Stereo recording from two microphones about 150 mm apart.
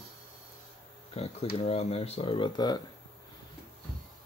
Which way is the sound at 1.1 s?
45° left (ahead or behind).